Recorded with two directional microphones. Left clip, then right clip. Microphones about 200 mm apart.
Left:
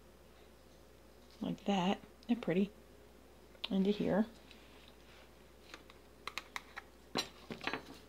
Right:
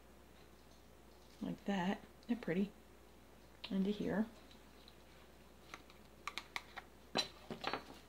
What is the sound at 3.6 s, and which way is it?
Speech, 25° left (ahead or behind).